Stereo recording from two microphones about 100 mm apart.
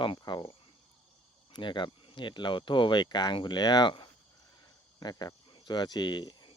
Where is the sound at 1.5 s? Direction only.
50° left (ahead or behind).